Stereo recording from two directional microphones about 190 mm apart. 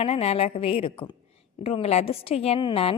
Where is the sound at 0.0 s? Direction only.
30° left (ahead or behind).